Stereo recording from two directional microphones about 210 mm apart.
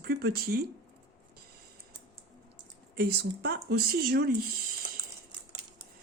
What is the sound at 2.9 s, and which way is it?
A woman's voice, 50° right (ahead or behind).